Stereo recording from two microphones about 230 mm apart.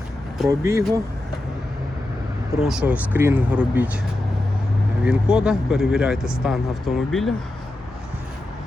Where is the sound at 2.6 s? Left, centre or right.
Centre.